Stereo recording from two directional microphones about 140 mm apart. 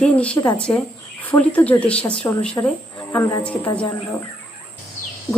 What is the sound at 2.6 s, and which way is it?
Speech, 20° left (ahead or behind).